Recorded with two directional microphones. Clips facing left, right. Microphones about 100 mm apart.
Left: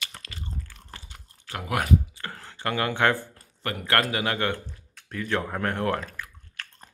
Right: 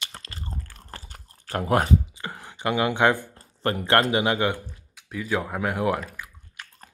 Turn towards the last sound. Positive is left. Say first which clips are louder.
# left 1 dB
turn(degrees=-15)  # may be behind; listen again after turning